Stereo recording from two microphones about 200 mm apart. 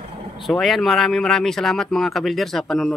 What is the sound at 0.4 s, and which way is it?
Speech, centre (ahead or behind).